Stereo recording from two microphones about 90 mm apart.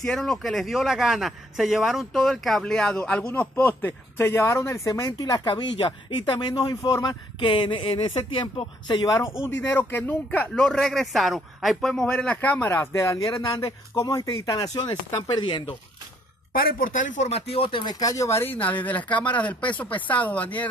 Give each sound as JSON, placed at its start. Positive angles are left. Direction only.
{"t": 0.0, "sound": "a man's voice", "side_deg": 5}
{"t": 6.6, "sound": "speech", "side_deg": 40}
{"t": 9.6, "sound": "a man's voice", "side_deg": 20}
{"t": 12.4, "sound": "a man's voice", "side_deg": 20}
{"t": 12.6, "sound": "speech", "side_deg": 30}
{"t": 13.5, "sound": "a man's voice", "side_deg": 70}
{"t": 14.0, "sound": "speech", "side_deg": 45}
{"t": 17.5, "sound": "speech", "side_deg": 85}
{"t": 17.8, "sound": "speech", "side_deg": 45}
{"t": 18.4, "sound": "a man's voice", "side_deg": 20}